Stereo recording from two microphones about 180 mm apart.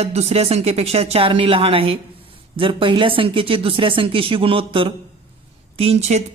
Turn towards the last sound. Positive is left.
turn(degrees=-35)  # may be behind; listen again after turning